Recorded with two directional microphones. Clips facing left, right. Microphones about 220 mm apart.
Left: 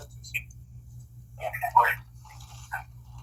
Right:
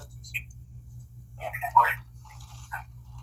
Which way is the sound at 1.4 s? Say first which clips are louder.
Even; 25° left (ahead or behind).